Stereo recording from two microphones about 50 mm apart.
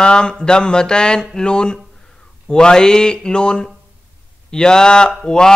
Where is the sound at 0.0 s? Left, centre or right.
Centre.